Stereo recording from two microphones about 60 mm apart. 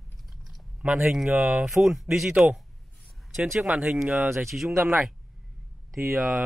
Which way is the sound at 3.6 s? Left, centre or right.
Centre.